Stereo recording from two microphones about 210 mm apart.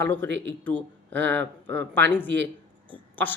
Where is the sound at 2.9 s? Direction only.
10° left (ahead or behind).